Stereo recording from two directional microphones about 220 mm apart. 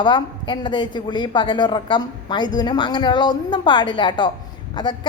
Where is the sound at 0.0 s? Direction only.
20° left (ahead or behind).